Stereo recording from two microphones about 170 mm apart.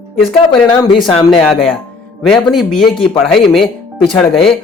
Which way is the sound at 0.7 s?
30° left (ahead or behind).